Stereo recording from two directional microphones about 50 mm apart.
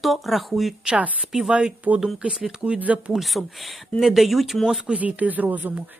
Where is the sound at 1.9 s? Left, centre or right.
Right.